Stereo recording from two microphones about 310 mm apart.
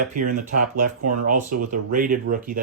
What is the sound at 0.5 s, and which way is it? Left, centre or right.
Speech, right.